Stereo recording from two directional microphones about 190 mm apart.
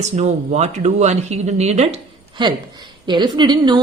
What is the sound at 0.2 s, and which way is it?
Speech, 35° right (ahead or behind).